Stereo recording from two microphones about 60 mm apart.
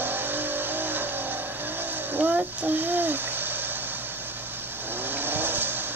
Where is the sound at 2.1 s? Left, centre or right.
Right.